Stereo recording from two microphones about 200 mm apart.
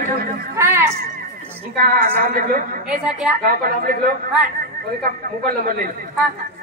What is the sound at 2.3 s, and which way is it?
Speech, 45° right (ahead or behind).